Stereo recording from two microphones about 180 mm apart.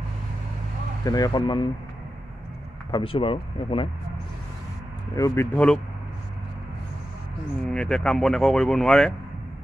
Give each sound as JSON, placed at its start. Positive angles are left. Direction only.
{"t": 1.0, "sound": "speech", "side_deg": 20}
{"t": 2.9, "sound": "speech", "side_deg": 30}
{"t": 5.1, "sound": "speech", "side_deg": 15}
{"t": 7.7, "sound": "speech", "side_deg": 5}